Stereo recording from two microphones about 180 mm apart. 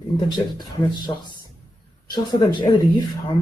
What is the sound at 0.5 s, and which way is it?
Speech, 25° left (ahead or behind).